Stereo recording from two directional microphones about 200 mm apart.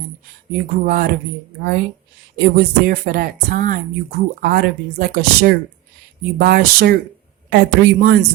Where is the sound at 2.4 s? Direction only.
50° right (ahead or behind).